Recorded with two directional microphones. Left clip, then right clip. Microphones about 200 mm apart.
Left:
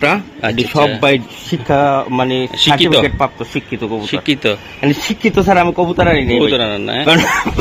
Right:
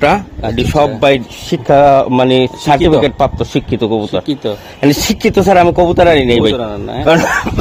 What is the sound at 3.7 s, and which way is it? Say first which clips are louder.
Speech: right 4 dB; 70° right (ahead or behind).